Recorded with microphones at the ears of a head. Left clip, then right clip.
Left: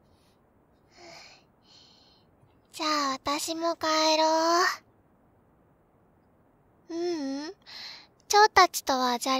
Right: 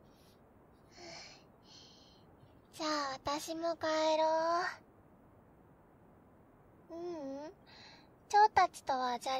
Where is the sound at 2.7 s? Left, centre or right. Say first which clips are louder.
Left 9 dB; left.